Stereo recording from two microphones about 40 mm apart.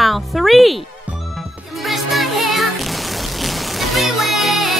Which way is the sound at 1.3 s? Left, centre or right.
Centre.